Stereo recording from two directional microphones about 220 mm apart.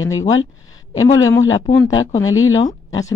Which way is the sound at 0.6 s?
65° left (ahead or behind).